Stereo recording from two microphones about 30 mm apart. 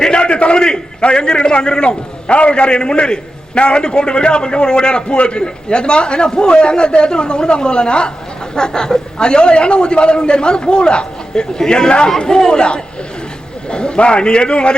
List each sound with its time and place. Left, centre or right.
0.0 s a man's voice: left